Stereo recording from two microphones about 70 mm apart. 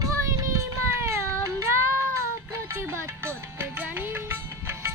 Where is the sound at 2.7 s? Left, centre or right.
Right.